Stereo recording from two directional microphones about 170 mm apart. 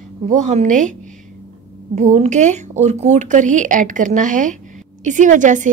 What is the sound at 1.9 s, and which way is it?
A woman's voice, 45° right (ahead or behind).